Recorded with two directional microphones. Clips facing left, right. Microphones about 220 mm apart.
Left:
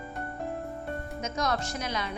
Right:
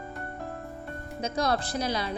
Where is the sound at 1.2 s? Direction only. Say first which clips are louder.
Right 4 dB; 30° right (ahead or behind).